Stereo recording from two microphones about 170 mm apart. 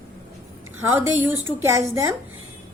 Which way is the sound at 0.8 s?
15° right (ahead or behind).